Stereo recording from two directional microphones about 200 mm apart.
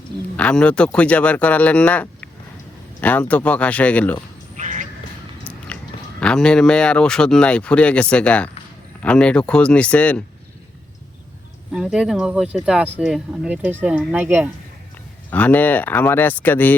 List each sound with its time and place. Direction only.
0.3 s speech: 5° left (ahead or behind)
4.5 s duck: 35° right (ahead or behind)
5.4 s biting: 5° left (ahead or behind)
6.1 s speech: 5° left (ahead or behind)
11.7 s speech: 5° right (ahead or behind)
15.3 s speech: 10° left (ahead or behind)